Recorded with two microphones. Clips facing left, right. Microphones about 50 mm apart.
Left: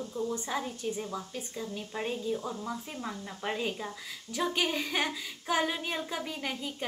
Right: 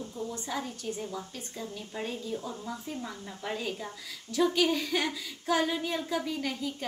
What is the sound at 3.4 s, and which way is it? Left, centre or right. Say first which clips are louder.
Speech: left 1 dB; left.